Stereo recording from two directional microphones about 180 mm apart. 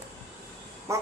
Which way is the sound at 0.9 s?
15° right (ahead or behind).